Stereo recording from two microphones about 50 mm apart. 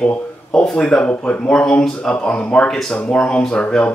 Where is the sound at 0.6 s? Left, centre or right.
Centre.